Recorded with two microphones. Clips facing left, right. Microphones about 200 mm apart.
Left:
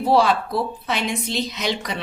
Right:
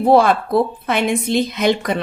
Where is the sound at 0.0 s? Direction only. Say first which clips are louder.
Right 5 dB; 55° right (ahead or behind).